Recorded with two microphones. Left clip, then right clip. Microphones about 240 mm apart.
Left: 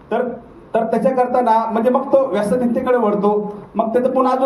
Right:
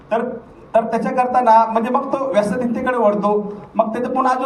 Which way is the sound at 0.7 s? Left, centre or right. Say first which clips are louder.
Left 1 dB; right.